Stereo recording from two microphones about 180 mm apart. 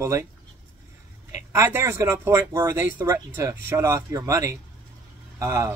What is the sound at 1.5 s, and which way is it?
Speech, 15° right (ahead or behind).